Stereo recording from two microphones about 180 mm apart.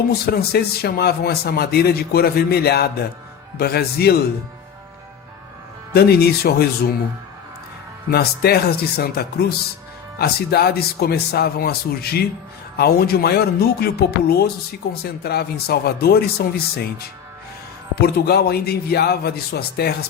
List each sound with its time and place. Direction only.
0.1 s a man's voice: 60° left (ahead or behind)
5.9 s a man's voice: 60° left (ahead or behind)
8.1 s a man's voice: 60° left (ahead or behind)